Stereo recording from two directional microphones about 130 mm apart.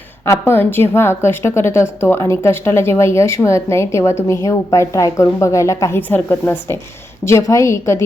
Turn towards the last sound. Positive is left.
turn(degrees=20)  # may be behind; listen again after turning